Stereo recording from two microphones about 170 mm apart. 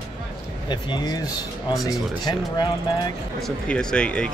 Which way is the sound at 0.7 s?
25° left (ahead or behind).